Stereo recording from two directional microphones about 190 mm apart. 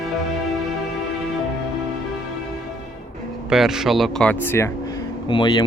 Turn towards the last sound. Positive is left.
turn(degrees=25)  # may be behind; listen again after turning